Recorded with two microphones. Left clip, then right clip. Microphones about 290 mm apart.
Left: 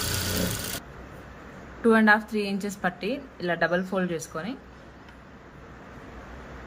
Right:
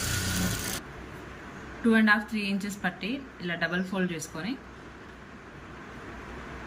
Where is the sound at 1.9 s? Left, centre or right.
Centre.